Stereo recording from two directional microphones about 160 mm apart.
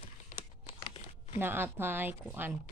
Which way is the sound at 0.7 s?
35° left (ahead or behind).